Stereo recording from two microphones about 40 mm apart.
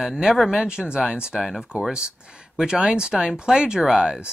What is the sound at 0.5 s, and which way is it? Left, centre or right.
Speech, right.